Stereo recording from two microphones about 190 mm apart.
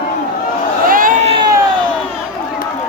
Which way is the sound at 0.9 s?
45° right (ahead or behind).